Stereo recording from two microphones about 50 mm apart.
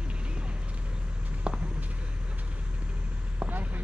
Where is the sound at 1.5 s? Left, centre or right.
Centre.